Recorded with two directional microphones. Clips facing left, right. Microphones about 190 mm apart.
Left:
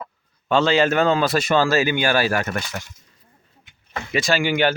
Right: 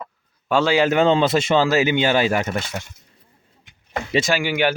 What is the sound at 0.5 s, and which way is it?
A man's voice, 10° right (ahead or behind).